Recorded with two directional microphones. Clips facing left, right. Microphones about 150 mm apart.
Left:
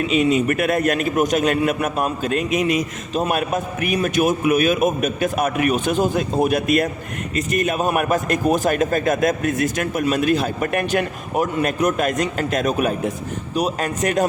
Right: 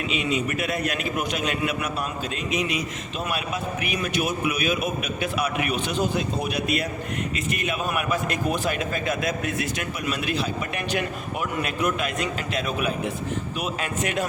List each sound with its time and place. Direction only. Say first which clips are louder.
0.1 s a man's voice: left 8 dB; 45° left (ahead or behind)